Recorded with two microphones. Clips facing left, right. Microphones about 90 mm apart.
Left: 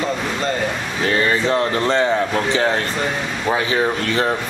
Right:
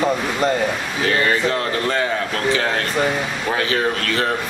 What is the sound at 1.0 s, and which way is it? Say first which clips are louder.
Speech: left 1 dB; 20° left (ahead or behind).